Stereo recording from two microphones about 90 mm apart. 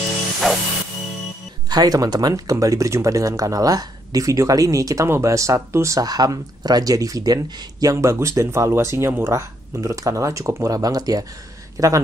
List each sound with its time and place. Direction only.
0.4 s music: centre (ahead or behind)
1.7 s speech: 45° right (ahead or behind)